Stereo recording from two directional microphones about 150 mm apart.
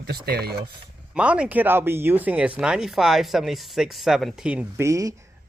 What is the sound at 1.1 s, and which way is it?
Speech, 5° right (ahead or behind).